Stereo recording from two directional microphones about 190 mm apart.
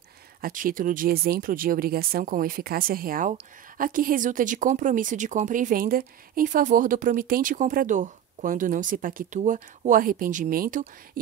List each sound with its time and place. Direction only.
0.4 s speech: 45° right (ahead or behind)